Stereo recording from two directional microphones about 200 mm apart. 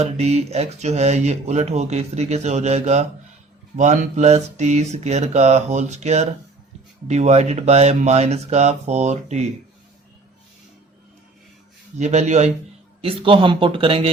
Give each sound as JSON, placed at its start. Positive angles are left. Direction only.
{"t": 0.0, "sound": "speech", "side_deg": -35}
{"t": 11.9, "sound": "speech", "side_deg": -35}